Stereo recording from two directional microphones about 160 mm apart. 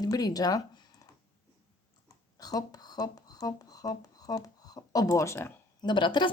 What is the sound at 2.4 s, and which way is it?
Speech, 25° left (ahead or behind).